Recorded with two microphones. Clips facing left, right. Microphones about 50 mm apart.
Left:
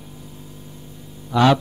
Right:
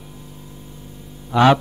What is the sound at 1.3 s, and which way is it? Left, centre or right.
Speech, right.